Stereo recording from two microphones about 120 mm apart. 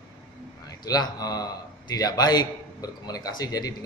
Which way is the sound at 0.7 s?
30° left (ahead or behind).